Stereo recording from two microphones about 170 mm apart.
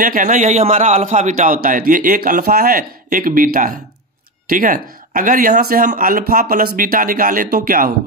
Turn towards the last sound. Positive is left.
turn(degrees=-60)  # may be behind; listen again after turning